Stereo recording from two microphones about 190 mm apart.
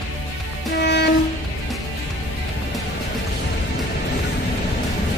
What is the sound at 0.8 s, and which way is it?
Train, 60° left (ahead or behind).